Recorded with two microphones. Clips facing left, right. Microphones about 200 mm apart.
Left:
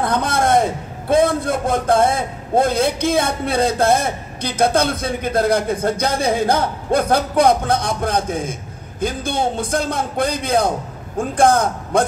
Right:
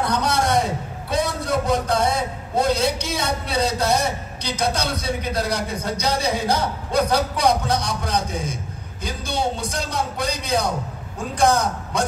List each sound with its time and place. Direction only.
0.0 s a man's voice: 50° left (ahead or behind)